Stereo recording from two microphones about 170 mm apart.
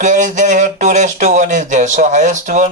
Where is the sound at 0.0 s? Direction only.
45° right (ahead or behind).